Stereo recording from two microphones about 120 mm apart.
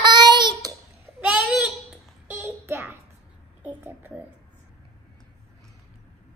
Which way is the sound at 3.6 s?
15° right (ahead or behind).